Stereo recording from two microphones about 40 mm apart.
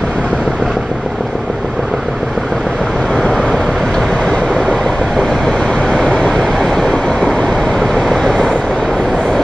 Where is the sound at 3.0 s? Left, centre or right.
Centre.